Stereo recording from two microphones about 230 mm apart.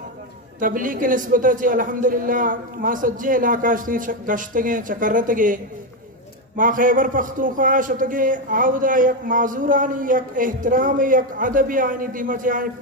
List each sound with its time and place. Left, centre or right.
0.6 s a man's voice: right